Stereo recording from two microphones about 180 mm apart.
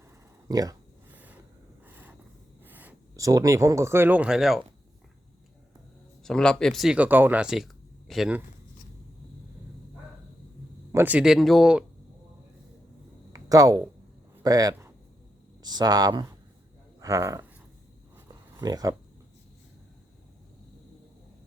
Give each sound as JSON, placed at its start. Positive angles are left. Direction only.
{"t": 0.4, "sound": "a sound", "side_deg": -20}
{"t": 2.6, "sound": "speech", "side_deg": -10}
{"t": 6.2, "sound": "speech", "side_deg": 5}
{"t": 10.9, "sound": "speech", "side_deg": -10}
{"t": 13.3, "sound": "speech", "side_deg": -20}
{"t": 17.0, "sound": "a sound", "side_deg": -20}
{"t": 18.6, "sound": "speech", "side_deg": -20}